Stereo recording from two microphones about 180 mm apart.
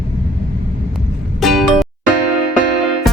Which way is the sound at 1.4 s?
Centre (ahead or behind).